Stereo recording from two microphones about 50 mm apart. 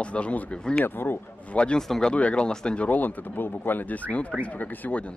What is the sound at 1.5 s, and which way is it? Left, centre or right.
Speech, left.